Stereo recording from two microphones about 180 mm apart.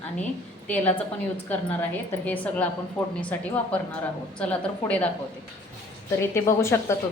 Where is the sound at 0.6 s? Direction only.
10° left (ahead or behind).